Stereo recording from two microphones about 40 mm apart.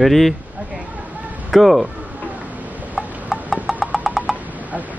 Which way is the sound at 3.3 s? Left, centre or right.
Centre.